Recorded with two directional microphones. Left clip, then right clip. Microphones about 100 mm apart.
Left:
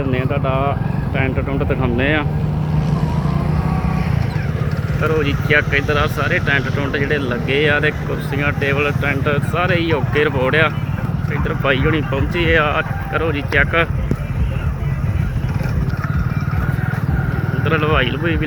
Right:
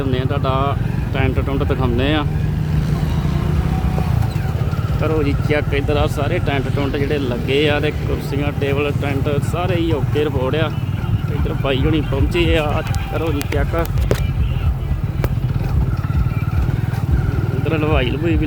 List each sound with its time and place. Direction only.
0.3 s speech: 30° right (ahead or behind)
5.2 s speech: 50° right (ahead or behind)
6.7 s speech: 40° right (ahead or behind)
12.3 s speech: 40° right (ahead or behind)
13.1 s speech: centre (ahead or behind)
17.7 s speech: 55° right (ahead or behind)